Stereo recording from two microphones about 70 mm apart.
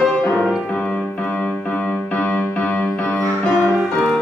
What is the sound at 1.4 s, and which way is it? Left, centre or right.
Music, left.